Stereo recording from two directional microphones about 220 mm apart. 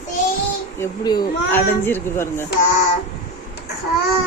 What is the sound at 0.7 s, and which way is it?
Speech, 20° left (ahead or behind).